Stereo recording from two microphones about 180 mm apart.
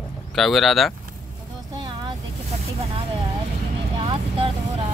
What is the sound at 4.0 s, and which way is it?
Vehicle, 30° right (ahead or behind).